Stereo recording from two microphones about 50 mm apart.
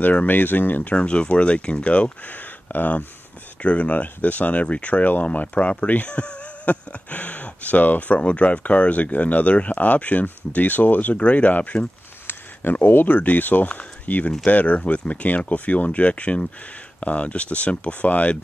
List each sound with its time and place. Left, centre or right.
0.0 s speech: left
0.9 s speech: left
3.6 s speech: left
12.3 s speech: left